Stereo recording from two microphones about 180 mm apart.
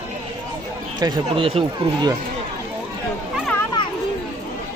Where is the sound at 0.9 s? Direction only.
20° right (ahead or behind).